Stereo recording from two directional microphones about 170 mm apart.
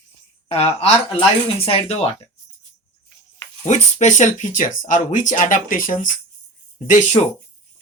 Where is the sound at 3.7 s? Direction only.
45° left (ahead or behind).